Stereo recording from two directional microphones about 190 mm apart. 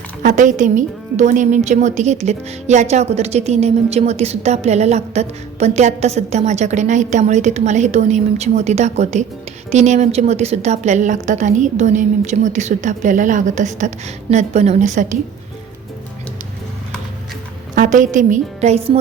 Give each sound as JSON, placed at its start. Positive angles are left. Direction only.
{"t": 0.2, "sound": "a woman's voice", "side_deg": -40}
{"t": 17.7, "sound": "a woman's voice", "side_deg": -40}